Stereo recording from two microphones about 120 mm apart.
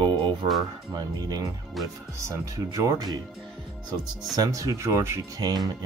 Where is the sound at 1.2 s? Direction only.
35° right (ahead or behind).